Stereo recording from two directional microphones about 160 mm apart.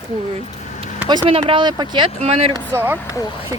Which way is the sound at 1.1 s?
30° right (ahead or behind).